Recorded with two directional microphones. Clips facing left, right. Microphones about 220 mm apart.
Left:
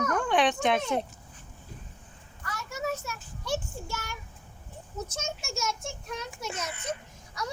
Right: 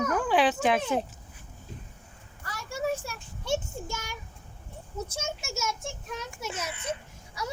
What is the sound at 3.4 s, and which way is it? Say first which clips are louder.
A child's voice: right 3 dB; 20° right (ahead or behind).